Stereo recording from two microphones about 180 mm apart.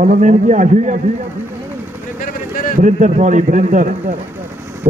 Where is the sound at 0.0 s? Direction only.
40° right (ahead or behind).